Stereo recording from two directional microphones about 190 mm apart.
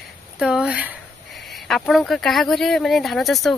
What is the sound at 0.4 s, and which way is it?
Speech, 5° right (ahead or behind).